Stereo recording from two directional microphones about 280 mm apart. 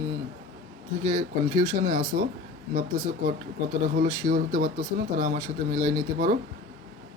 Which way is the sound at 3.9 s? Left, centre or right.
Right.